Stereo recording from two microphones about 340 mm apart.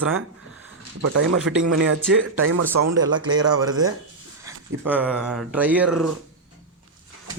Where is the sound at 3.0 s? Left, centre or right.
Centre.